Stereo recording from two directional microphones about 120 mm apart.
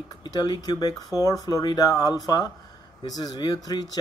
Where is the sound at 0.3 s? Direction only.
35° left (ahead or behind).